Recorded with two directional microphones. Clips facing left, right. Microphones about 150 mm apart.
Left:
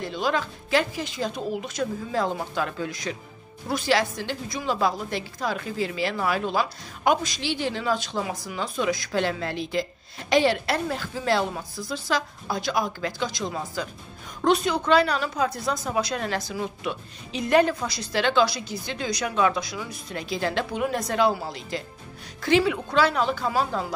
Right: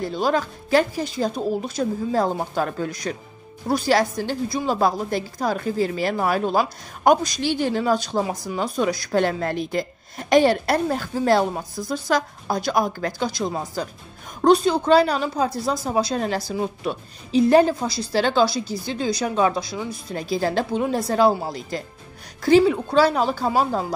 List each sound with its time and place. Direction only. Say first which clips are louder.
0.0 s a woman's voice: right 4 dB; 40° right (ahead or behind)